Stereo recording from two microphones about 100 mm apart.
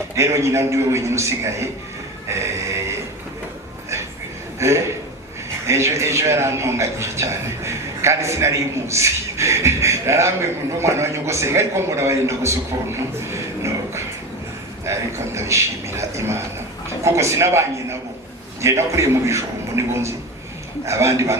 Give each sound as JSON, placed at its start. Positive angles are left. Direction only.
{"t": 0.2, "sound": "a man's voice", "side_deg": -30}
{"t": 2.3, "sound": "a sound", "side_deg": -30}
{"t": 4.6, "sound": "a man's voice", "side_deg": -30}
{"t": 15.4, "sound": "a man's voice", "side_deg": -30}